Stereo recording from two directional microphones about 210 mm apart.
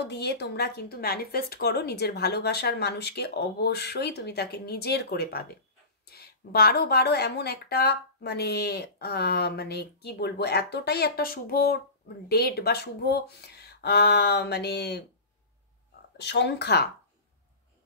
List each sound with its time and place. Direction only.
0.0 s speech: 50° left (ahead or behind)
16.2 s speech: 55° left (ahead or behind)